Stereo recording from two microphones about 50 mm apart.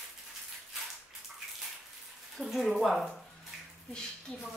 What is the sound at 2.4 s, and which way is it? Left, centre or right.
Speech, centre.